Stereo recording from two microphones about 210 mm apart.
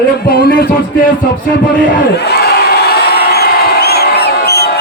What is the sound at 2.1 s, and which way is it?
Crowd, 50° left (ahead or behind).